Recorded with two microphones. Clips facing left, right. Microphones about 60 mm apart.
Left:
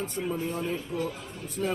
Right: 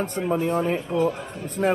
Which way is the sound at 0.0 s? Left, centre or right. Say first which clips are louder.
Right 7 dB; right.